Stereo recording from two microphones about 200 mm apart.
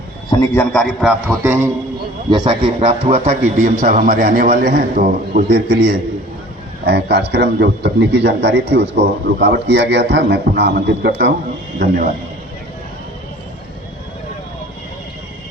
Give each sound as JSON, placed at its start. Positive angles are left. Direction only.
{"t": 0.3, "sound": "a man's voice", "side_deg": 20}
{"t": 1.3, "sound": "a man's voice", "side_deg": -10}
{"t": 2.3, "sound": "a man's voice", "side_deg": -25}